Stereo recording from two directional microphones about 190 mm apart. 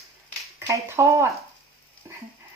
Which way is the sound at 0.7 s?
15° right (ahead or behind).